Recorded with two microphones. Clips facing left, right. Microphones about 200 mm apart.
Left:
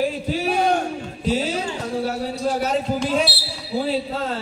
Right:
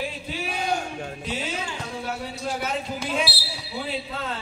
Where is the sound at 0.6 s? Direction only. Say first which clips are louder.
Left 6 dB; 60° left (ahead or behind).